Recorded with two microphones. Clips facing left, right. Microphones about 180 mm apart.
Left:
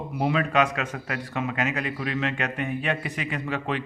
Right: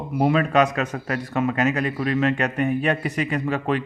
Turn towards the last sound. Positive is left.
turn(degrees=-45)  # may be behind; listen again after turning